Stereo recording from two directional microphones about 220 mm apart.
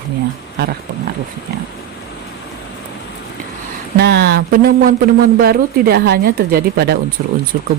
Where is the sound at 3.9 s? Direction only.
50° right (ahead or behind).